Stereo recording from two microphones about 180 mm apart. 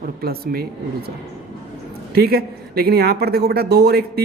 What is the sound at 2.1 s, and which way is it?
Speech, 60° right (ahead or behind).